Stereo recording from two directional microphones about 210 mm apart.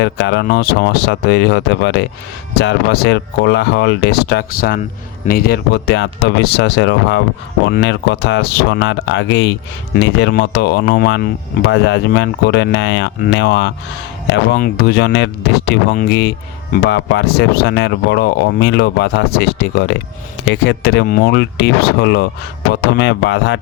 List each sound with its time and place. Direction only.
0.0 s speech: 55° left (ahead or behind)